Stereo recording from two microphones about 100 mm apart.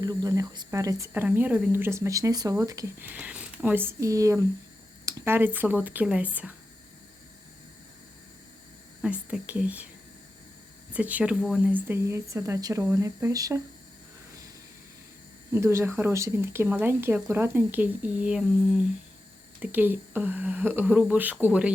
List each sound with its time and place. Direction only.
0.0 s speech: 40° right (ahead or behind)
1.1 s speech: 20° right (ahead or behind); by 2.9 s 35° right (ahead or behind)
3.0 s speech: 15° right (ahead or behind)
4.0 s speech: 30° right (ahead or behind)
5.0 s a sound: 35° right (ahead or behind)
5.3 s speech: 20° right (ahead or behind)
9.0 s speech: 10° right (ahead or behind)
10.9 s speech: 15° right (ahead or behind)
11.7 s speech: 25° right (ahead or behind)
15.5 s speech: 25° right (ahead or behind); by 18.8 s 10° right (ahead or behind)
19.6 s speech: 20° right (ahead or behind)